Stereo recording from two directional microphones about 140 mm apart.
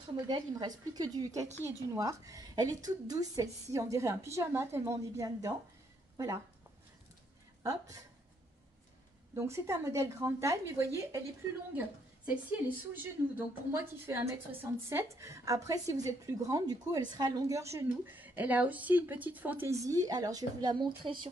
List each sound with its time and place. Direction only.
0.3 s a woman's voice: 30° right (ahead or behind)
7.6 s a woman's voice: 25° right (ahead or behind)
9.3 s a woman's voice: 20° right (ahead or behind)
12.3 s a woman's voice: 10° right (ahead or behind); by 21.3 s 35° right (ahead or behind)